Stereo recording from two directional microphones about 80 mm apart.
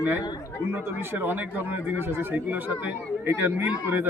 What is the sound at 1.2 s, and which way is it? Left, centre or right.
Speech, right.